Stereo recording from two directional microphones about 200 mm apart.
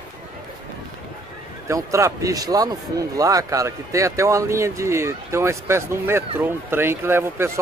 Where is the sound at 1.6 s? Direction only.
15° right (ahead or behind).